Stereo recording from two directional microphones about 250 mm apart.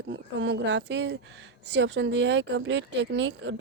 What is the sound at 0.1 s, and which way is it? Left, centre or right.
Speech, right.